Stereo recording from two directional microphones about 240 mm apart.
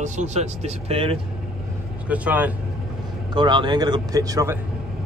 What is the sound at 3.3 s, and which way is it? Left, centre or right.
Speech, centre.